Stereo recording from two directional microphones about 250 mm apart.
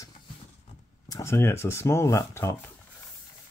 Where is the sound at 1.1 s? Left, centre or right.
Centre.